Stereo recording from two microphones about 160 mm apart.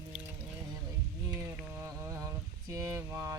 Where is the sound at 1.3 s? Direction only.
15° right (ahead or behind).